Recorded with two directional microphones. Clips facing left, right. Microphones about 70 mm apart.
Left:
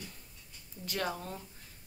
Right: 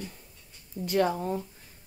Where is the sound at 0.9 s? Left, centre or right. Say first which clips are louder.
Right 10 dB; right.